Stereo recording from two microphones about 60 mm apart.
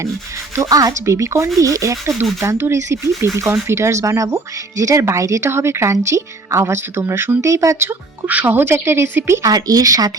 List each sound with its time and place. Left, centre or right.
0.7 s speech: right
1.5 s speech: right
2.4 s a woman's voice: right
8.3 s a woman's voice: right
9.4 s speech: right